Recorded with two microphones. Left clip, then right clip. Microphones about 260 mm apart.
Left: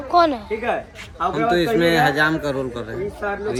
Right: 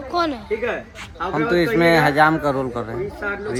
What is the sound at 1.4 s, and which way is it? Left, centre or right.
Speech, right.